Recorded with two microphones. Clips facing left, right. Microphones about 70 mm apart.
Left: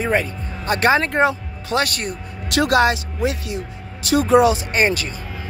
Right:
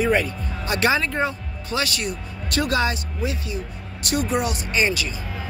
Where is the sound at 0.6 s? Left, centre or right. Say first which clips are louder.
Left 4 dB; left.